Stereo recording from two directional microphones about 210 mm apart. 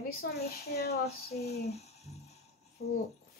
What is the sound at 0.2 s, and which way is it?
Speech, 50° left (ahead or behind).